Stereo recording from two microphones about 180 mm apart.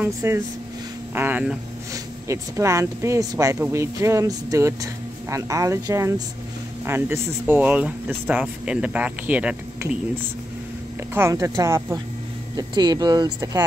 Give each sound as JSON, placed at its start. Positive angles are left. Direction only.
{"t": 0.0, "sound": "speech", "side_deg": -15}
{"t": 11.1, "sound": "speech", "side_deg": -15}